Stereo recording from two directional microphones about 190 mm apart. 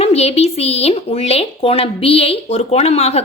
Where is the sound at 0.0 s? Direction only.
35° left (ahead or behind).